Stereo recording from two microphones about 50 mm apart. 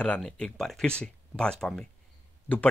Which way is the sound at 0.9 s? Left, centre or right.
Centre.